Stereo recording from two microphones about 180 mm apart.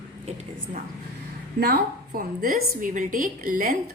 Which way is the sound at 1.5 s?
55° right (ahead or behind).